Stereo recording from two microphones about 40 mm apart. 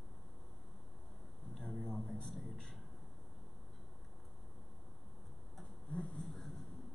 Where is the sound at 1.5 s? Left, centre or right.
Centre.